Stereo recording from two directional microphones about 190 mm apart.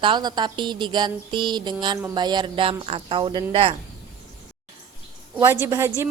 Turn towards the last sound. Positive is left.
turn(degrees=-15)  # may be behind; listen again after turning